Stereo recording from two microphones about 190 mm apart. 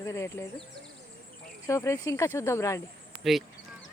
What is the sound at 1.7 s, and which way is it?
Speech, 15° left (ahead or behind).